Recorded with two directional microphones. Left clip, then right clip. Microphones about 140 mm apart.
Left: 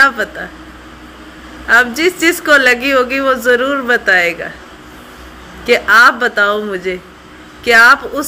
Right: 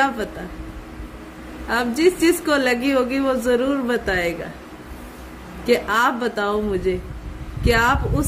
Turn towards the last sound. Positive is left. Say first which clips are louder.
# left 11 dB
turn(degrees=-20)  # may be behind; listen again after turning